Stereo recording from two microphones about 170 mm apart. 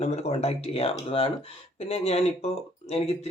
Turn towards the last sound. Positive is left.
turn(degrees=35)  # may be behind; listen again after turning